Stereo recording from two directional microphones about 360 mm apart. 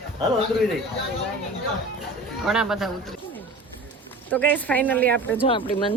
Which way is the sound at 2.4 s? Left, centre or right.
Centre.